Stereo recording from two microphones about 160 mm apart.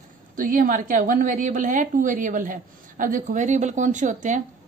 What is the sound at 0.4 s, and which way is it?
Speech, 55° right (ahead or behind).